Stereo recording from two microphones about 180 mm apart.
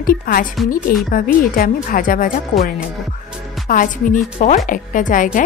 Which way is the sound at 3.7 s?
50° left (ahead or behind).